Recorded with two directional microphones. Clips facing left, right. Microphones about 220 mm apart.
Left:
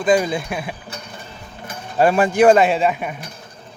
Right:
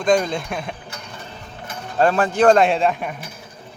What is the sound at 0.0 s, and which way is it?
Speech, 5° left (ahead or behind).